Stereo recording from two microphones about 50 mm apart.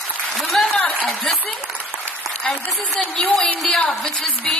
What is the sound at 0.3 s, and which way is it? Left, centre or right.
Applause, centre.